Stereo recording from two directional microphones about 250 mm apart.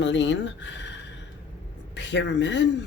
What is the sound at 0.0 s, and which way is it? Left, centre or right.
Speech, left.